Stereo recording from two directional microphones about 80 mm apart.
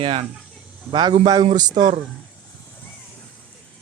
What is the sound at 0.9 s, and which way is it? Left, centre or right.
A man's voice, right.